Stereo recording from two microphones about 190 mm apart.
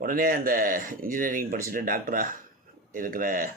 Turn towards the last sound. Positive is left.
turn(degrees=-50)  # may be behind; listen again after turning